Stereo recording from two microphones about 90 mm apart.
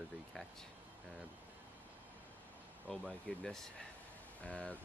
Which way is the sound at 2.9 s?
15° left (ahead or behind).